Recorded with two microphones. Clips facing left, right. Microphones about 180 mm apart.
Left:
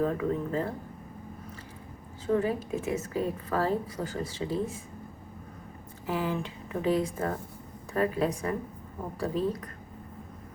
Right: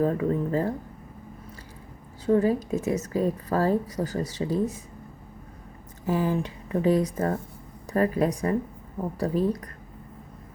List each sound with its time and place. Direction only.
0.0 s a woman's voice: 40° right (ahead or behind)
2.2 s a woman's voice: 40° right (ahead or behind)
6.1 s a woman's voice: 40° right (ahead or behind)